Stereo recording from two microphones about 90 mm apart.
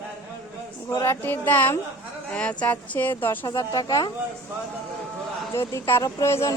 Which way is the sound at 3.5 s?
50° left (ahead or behind).